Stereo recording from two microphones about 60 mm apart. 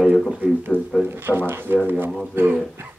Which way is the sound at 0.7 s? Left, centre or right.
Right.